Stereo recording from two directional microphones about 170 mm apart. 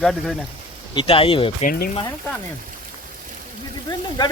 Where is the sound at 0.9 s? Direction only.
30° left (ahead or behind).